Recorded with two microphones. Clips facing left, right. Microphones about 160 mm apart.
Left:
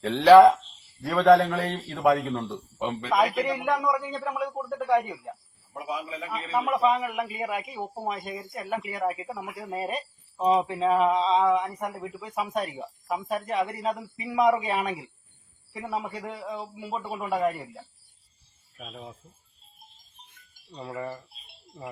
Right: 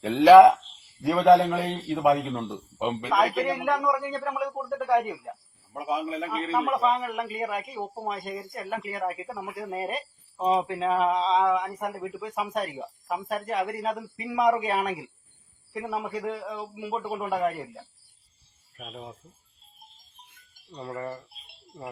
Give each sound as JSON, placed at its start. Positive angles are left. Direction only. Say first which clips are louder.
{"t": 0.0, "sound": "a man's voice", "louder": "right 1 dB", "side_deg": -10}
{"t": 3.3, "sound": "speech", "louder": "even", "side_deg": 0}
{"t": 5.7, "sound": "a man's voice", "louder": "right 4 dB", "side_deg": -50}
{"t": 6.5, "sound": "speech", "louder": "left 1 dB", "side_deg": 0}
{"t": 18.8, "sound": "speech", "louder": "right 1 dB", "side_deg": -5}
{"t": 20.7, "sound": "speech", "louder": "even", "side_deg": 5}